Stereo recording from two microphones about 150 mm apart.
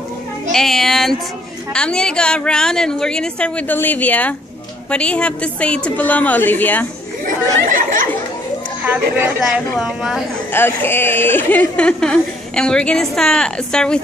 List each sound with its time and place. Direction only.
0.5 s a woman's voice: 5° left (ahead or behind)
7.6 s speech: 65° right (ahead or behind)
8.8 s a woman's voice: 10° right (ahead or behind)
10.5 s speech: 15° left (ahead or behind)